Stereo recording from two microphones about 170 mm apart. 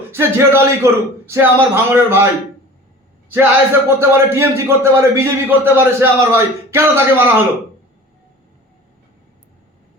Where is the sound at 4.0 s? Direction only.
15° right (ahead or behind).